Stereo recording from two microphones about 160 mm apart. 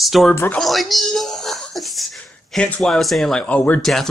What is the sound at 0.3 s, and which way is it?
Speech, 15° left (ahead or behind).